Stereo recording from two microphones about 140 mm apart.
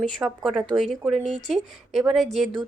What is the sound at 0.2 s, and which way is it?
Speech, 15° right (ahead or behind).